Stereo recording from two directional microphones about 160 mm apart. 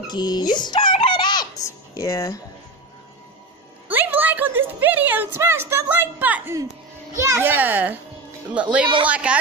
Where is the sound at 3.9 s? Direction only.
10° right (ahead or behind).